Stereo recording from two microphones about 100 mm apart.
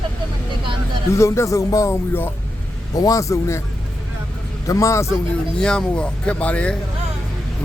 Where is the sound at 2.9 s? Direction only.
35° left (ahead or behind).